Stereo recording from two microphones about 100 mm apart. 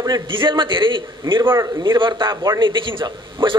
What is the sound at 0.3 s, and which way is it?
Speech, 55° right (ahead or behind).